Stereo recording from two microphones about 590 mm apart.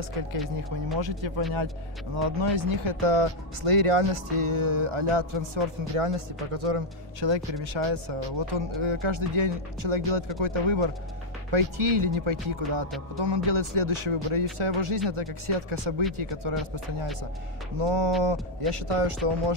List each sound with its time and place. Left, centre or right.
1.0 s speech: right
5.9 s speech: right